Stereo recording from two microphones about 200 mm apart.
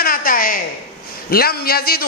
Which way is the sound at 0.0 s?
45° left (ahead or behind).